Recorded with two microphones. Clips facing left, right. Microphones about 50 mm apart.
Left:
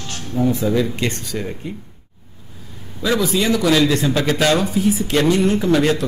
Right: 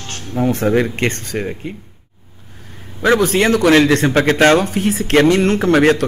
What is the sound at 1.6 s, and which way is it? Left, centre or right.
Speech, right.